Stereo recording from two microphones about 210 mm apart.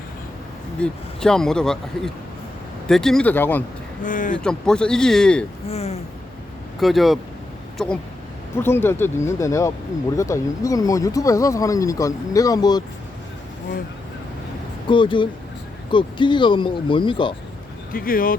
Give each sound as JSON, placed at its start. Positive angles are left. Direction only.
{"t": 0.8, "sound": "speech", "side_deg": 5}
{"t": 2.8, "sound": "speech", "side_deg": 0}
{"t": 4.0, "sound": "speech", "side_deg": 40}
{"t": 4.4, "sound": "speech", "side_deg": 5}
{"t": 5.6, "sound": "speech", "side_deg": 30}
{"t": 6.7, "sound": "speech", "side_deg": 0}
{"t": 14.8, "sound": "speech", "side_deg": 25}
{"t": 17.9, "sound": "speech", "side_deg": 45}